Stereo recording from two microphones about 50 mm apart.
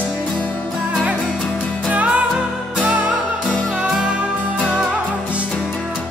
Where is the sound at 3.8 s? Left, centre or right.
Centre.